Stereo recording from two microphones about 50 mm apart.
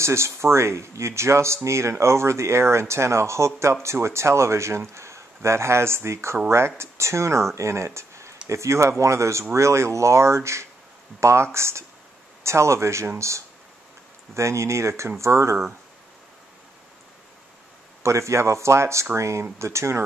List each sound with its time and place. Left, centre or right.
0.0 s speech: right
14.3 s speech: right
18.0 s speech: right
19.1 s speech: right
19.6 s speech: right